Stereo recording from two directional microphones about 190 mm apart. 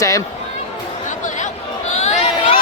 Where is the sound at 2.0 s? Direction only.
35° left (ahead or behind).